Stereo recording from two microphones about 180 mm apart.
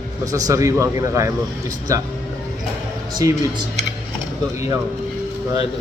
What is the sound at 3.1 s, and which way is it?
Speech, 20° right (ahead or behind).